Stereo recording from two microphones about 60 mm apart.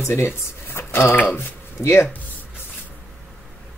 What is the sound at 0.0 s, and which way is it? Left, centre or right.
Speech, left.